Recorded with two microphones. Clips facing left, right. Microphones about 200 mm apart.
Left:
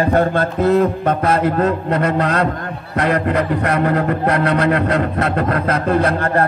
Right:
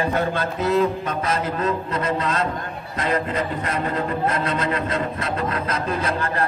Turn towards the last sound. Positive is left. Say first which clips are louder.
# left 8 dB
turn(degrees=60)  # may be behind; listen again after turning